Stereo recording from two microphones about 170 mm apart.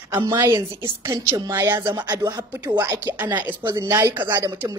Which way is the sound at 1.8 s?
25° right (ahead or behind).